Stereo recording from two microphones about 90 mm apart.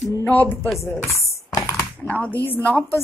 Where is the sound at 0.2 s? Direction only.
25° left (ahead or behind).